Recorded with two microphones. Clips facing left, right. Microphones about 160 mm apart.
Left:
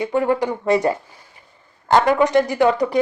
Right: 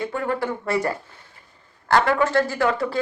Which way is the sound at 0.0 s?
15° left (ahead or behind).